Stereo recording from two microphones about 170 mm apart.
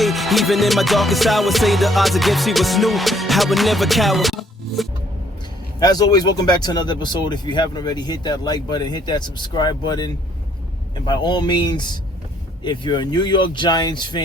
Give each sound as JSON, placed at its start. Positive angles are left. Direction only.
{"t": 0.0, "sound": "music", "side_deg": 0}
{"t": 5.8, "sound": "speech", "side_deg": 25}